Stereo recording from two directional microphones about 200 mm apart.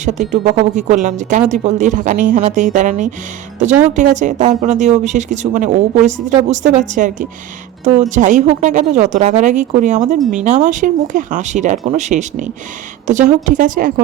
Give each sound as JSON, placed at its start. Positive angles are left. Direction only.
{"t": 0.0, "sound": "speech", "side_deg": -35}